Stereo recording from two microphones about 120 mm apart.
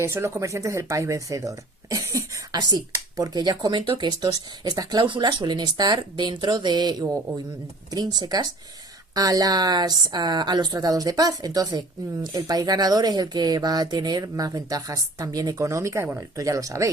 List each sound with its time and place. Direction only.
0.0 s speech: 20° right (ahead or behind)